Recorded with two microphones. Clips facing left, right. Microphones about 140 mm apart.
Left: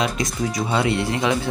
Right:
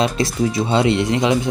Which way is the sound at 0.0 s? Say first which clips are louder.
Right 5 dB; 30° right (ahead or behind).